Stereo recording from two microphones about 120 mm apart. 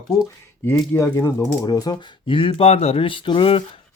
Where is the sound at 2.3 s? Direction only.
50° left (ahead or behind).